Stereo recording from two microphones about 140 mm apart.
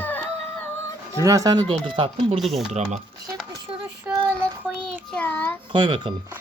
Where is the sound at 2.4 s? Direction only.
Centre (ahead or behind).